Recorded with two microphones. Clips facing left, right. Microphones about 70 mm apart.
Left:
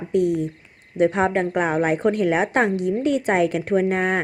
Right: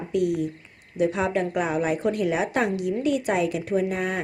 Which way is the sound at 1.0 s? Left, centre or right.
Left.